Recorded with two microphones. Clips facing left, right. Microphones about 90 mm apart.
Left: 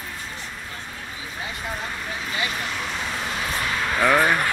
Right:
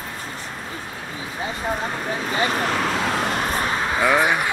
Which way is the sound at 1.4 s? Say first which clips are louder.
Right 6 dB; 35° right (ahead or behind).